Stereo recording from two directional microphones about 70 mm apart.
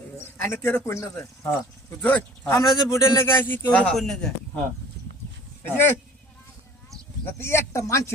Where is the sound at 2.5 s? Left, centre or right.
Left.